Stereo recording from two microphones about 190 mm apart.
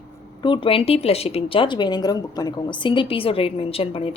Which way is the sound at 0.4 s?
25° left (ahead or behind).